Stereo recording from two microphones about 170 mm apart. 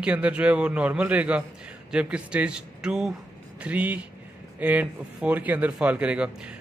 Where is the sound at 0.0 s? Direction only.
10° right (ahead or behind).